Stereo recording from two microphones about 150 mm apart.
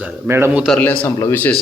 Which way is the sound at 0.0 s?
15° right (ahead or behind).